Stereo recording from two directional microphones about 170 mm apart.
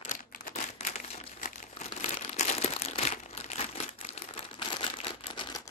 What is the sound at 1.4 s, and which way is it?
Crumpling, 50° left (ahead or behind).